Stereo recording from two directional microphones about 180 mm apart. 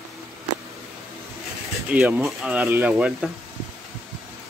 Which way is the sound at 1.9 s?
10° right (ahead or behind).